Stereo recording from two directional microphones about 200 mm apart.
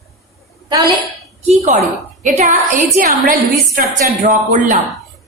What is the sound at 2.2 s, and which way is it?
A woman's voice, 40° right (ahead or behind).